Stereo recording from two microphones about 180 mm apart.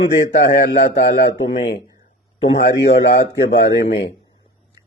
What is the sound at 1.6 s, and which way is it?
A man's voice, 65° left (ahead or behind).